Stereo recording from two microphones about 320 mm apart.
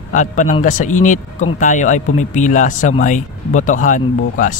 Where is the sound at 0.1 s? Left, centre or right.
Left.